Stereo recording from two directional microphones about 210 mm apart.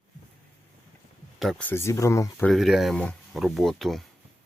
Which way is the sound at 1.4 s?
Centre (ahead or behind).